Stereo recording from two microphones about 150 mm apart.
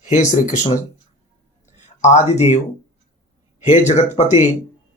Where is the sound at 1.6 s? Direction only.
50° left (ahead or behind).